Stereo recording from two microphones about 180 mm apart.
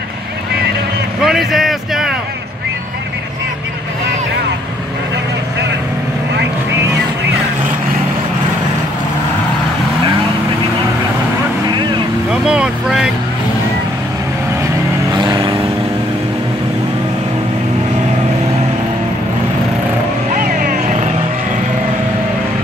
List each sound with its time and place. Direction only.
1.2 s speech: centre (ahead or behind)
12.3 s vehicle: 5° right (ahead or behind)
15.1 s vehicle: 25° right (ahead or behind)
20.2 s vehicle: 45° right (ahead or behind)